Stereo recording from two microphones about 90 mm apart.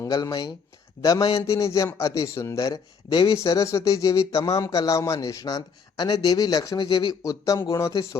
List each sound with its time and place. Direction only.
0.1 s speech: 50° left (ahead or behind)
1.4 s speech: 35° left (ahead or behind); by 3.3 s 55° left (ahead or behind)
3.3 s speech: 35° left (ahead or behind)
6.8 s speech: 65° left (ahead or behind)
7.1 s speech: 40° left (ahead or behind)